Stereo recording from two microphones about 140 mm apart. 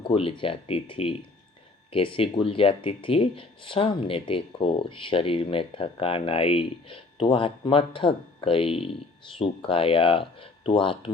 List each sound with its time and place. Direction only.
0.0 s speech: 40° left (ahead or behind)